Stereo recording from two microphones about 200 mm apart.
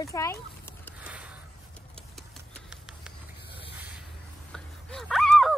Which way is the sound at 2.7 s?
5° right (ahead or behind).